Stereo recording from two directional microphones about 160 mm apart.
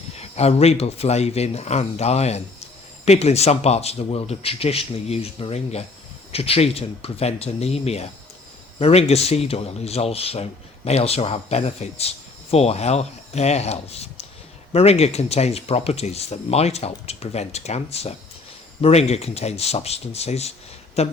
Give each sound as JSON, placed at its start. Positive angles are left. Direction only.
{"t": 0.2, "sound": "speech", "side_deg": 40}